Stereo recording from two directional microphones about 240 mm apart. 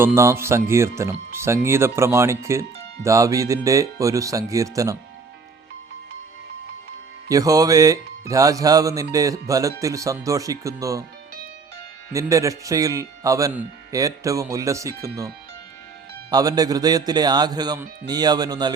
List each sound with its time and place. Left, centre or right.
0.0 s speech: centre
7.3 s speech: centre
12.1 s speech: centre
16.3 s speech: centre